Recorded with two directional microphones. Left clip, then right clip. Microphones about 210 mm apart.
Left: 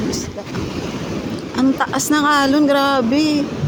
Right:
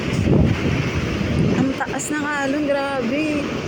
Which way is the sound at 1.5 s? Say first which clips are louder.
Left 5 dB; 15° left (ahead or behind).